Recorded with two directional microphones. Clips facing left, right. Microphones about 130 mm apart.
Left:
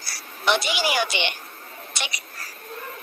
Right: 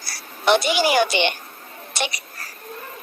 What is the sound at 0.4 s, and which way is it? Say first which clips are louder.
A woman's voice: right 5 dB; 45° right (ahead or behind).